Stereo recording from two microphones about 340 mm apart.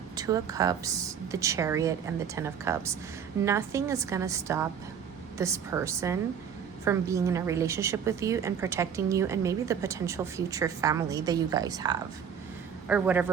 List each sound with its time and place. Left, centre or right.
0.2 s a woman's voice: centre